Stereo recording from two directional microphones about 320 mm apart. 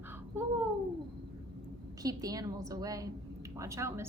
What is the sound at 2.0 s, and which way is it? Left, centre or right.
A woman's voice, centre.